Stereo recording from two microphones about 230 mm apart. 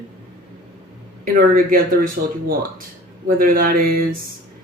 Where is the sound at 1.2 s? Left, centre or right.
Right.